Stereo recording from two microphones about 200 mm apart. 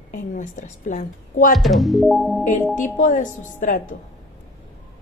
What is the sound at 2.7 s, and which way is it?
Speech, 40° left (ahead or behind).